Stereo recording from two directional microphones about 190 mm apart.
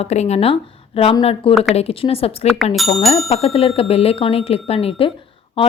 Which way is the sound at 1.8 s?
30° left (ahead or behind).